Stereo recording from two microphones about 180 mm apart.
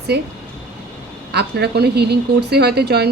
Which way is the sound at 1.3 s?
65° right (ahead or behind).